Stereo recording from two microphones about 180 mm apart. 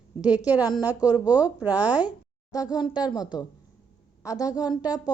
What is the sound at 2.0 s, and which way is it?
A child's voice, 20° left (ahead or behind).